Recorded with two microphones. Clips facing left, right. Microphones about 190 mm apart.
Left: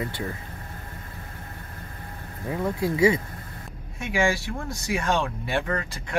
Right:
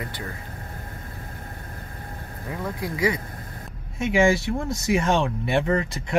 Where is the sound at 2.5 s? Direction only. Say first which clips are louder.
Left 4 dB; 25° left (ahead or behind).